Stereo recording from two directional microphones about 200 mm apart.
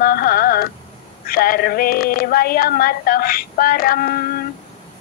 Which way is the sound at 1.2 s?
50° left (ahead or behind).